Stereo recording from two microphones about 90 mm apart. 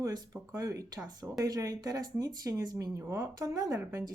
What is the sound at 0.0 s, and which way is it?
Speech, 40° right (ahead or behind).